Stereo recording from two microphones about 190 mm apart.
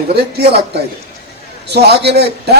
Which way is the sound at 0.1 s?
60° right (ahead or behind).